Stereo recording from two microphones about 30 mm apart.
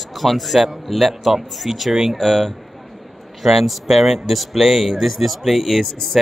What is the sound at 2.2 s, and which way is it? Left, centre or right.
A man's voice, centre.